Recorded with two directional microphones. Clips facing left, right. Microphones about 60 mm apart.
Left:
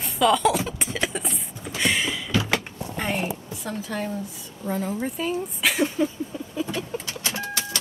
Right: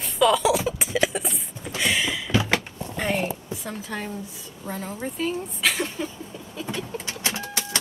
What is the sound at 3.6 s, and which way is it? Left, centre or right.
Speech, centre.